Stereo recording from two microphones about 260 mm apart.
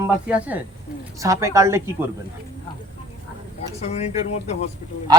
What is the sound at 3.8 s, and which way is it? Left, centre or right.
Speech, left.